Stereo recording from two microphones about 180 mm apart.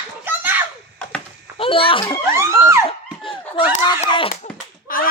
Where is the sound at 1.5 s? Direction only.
30° left (ahead or behind).